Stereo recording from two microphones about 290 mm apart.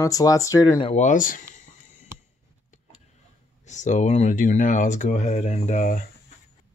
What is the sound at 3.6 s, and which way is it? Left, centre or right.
Speech, left.